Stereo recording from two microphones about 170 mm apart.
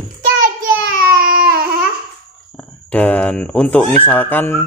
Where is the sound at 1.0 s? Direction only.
55° right (ahead or behind).